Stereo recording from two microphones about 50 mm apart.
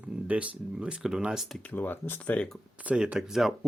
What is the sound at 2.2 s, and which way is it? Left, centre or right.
Speech, left.